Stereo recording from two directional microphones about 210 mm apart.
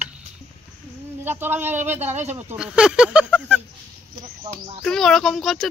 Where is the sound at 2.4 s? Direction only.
5° right (ahead or behind).